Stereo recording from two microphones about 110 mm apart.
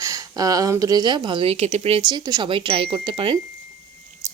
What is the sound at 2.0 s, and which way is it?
Speech, 40° right (ahead or behind).